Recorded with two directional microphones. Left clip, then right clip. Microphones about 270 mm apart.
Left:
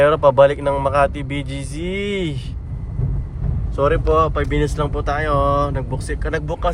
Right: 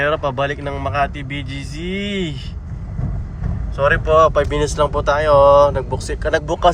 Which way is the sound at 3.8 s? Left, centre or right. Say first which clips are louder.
Right 2 dB; centre.